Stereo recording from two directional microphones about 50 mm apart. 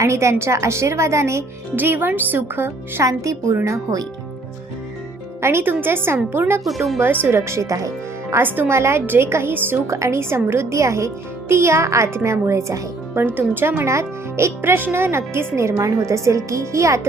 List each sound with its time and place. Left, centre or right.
0.0 s a woman's voice: right
1.7 s speech: right
3.0 s a woman's voice: right
5.4 s speech: right
5.6 s speech: right
6.7 s speech: centre
7.0 s speech: right
8.4 s speech: right
8.6 s speech: right
9.0 s speech: right
9.8 s a woman's voice: right
11.4 s a woman's voice: right
13.1 s speech: right
13.8 s a child's voice: right